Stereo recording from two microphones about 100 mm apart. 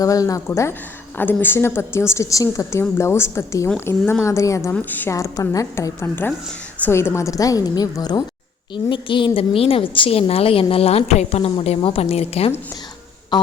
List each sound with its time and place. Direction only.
0.0 s a woman's voice: 35° left (ahead or behind)
4.7 s a woman's voice: 20° left (ahead or behind)
5.1 s a woman's voice: 35° left (ahead or behind)
8.7 s a woman's voice: 55° left (ahead or behind); by 11.5 s 90° left
11.8 s a woman's voice: 70° left (ahead or behind); by 12.5 s 90° left
13.3 s music: 45° left (ahead or behind)